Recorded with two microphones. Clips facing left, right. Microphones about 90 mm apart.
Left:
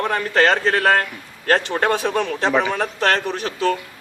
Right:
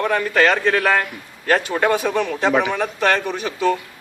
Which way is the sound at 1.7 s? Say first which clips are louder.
Right 1 dB; 10° right (ahead or behind).